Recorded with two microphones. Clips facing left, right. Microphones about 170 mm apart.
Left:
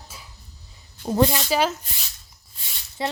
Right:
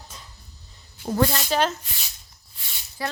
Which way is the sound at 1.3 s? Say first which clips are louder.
Left 1 dB; 5° left (ahead or behind).